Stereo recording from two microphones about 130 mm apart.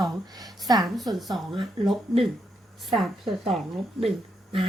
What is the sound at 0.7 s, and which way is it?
Speech, 30° right (ahead or behind).